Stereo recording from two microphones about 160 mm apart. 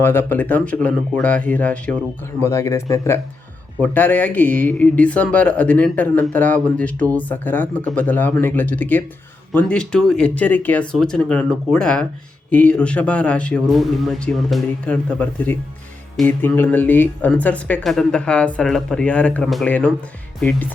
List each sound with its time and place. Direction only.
0.0 s speech: 15° left (ahead or behind)